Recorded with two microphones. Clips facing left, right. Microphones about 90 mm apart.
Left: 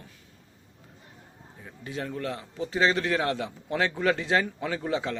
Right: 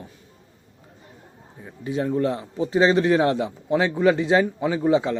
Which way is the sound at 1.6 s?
15° right (ahead or behind).